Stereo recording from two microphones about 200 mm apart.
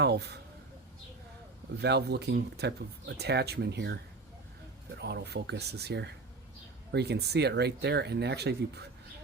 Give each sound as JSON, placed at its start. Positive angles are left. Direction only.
{"t": 0.0, "sound": "speech", "side_deg": -55}
{"t": 1.8, "sound": "speech", "side_deg": -55}
{"t": 4.9, "sound": "speech", "side_deg": -55}